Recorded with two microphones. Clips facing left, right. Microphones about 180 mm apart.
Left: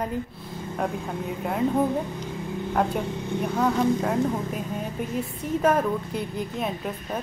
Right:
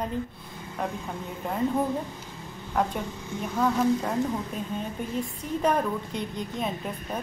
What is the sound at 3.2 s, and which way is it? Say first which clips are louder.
Speech: left 6 dB; 60° left (ahead or behind).